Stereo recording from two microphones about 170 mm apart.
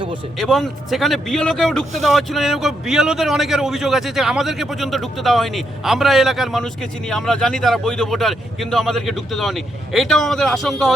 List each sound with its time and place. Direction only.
0.3 s a man's voice: centre (ahead or behind)